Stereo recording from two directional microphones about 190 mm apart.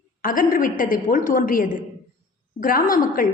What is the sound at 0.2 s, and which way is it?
A woman's voice, 45° left (ahead or behind).